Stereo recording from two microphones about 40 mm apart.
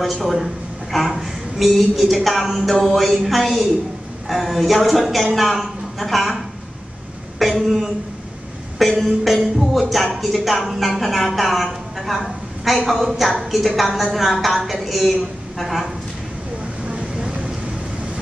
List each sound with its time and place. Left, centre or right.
0.0 s a woman's voice: centre
7.3 s a sound: centre
8.7 s speech: centre
9.6 s music: centre
10.1 s a woman's voice: centre
16.8 s vehicle: right